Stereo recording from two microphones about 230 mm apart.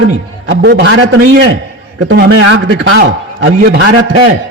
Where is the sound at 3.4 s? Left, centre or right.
Right.